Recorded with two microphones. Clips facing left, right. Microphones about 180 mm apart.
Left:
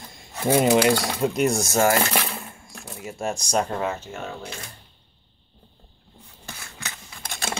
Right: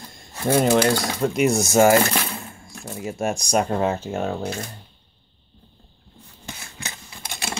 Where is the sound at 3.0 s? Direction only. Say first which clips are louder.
Right 4 dB; 25° right (ahead or behind).